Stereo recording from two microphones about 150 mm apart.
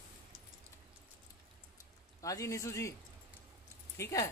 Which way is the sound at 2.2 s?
20° left (ahead or behind).